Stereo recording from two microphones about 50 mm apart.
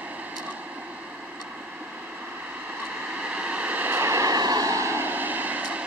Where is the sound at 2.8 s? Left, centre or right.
Right.